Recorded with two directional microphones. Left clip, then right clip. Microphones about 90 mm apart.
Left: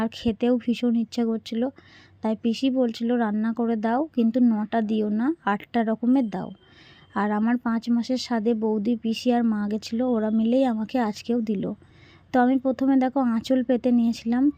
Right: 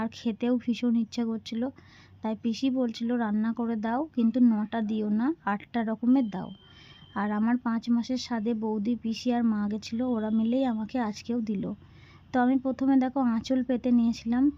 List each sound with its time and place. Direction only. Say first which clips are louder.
0.0 s speech: left 6 dB; 40° left (ahead or behind)